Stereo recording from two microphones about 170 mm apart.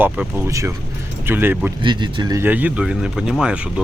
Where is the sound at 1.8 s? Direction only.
25° right (ahead or behind).